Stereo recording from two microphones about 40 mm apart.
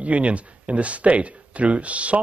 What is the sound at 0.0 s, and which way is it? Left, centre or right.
Speech, right.